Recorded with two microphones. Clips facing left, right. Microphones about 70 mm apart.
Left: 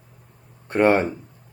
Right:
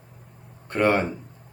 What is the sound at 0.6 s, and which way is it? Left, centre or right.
Speech, centre.